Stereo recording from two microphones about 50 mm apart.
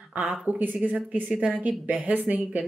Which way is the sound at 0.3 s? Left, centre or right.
Right.